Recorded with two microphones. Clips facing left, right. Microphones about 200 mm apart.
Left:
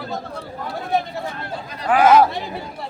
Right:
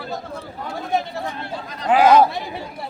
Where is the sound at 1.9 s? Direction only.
20° right (ahead or behind).